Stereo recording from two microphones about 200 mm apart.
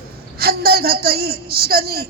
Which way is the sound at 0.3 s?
50° right (ahead or behind).